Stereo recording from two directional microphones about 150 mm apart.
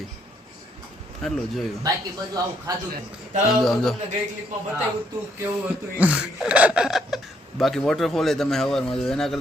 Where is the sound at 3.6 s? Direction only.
Centre (ahead or behind).